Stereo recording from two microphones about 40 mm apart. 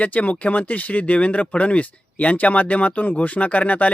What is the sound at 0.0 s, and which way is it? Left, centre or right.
Speech, left.